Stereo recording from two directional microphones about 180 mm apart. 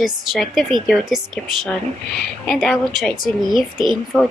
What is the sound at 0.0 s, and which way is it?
A woman's voice, centre (ahead or behind).